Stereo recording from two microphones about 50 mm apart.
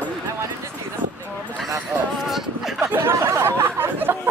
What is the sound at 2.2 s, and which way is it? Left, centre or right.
Speech, centre.